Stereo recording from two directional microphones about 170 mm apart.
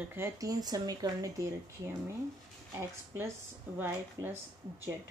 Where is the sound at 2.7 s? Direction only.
15° right (ahead or behind).